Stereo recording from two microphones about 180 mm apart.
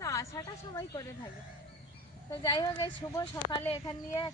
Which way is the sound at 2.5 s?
25° left (ahead or behind).